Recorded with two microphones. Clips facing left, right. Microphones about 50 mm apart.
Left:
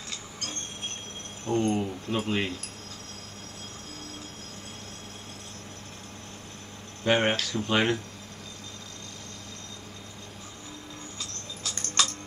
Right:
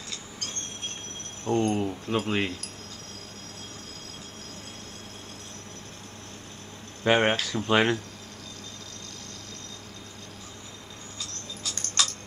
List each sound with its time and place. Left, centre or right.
1.5 s speech: centre
7.1 s speech: centre
11.7 s a sound: centre